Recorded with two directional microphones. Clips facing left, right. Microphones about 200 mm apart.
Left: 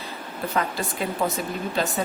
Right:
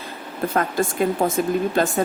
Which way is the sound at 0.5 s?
50° right (ahead or behind).